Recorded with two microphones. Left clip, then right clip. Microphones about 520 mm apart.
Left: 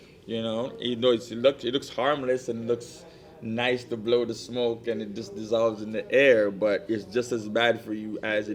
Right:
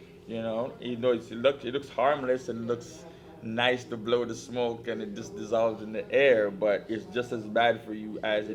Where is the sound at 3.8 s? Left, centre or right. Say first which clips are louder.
Left 3 dB; left.